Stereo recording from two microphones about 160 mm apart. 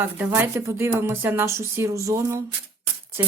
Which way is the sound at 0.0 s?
10° right (ahead or behind).